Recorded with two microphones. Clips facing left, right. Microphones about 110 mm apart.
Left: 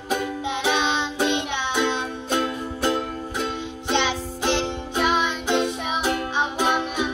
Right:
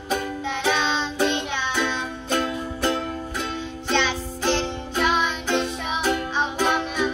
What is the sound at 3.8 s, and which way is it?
Music, 15° left (ahead or behind).